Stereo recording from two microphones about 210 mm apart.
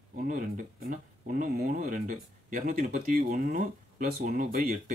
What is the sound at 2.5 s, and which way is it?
Speech, 40° right (ahead or behind).